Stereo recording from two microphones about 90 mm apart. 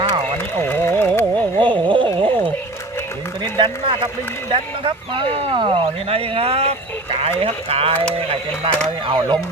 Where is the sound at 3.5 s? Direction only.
70° right (ahead or behind).